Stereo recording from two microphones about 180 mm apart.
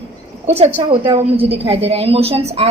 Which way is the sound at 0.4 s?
35° right (ahead or behind).